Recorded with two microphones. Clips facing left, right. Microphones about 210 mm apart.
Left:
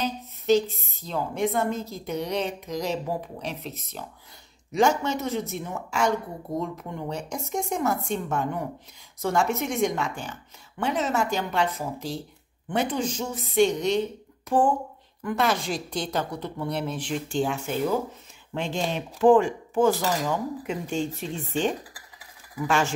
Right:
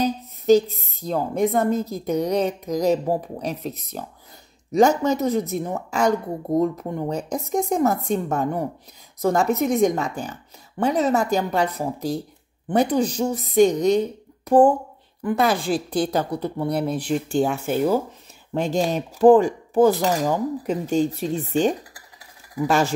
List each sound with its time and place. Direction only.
0.0 s a woman's voice: 40° right (ahead or behind)